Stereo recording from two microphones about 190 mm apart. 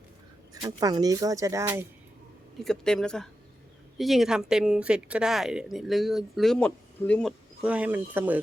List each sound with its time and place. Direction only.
0.5 s speech: 20° right (ahead or behind)
2.6 s speech: 5° left (ahead or behind)